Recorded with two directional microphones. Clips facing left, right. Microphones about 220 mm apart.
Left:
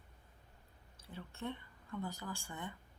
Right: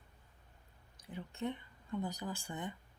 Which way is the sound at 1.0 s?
20° right (ahead or behind).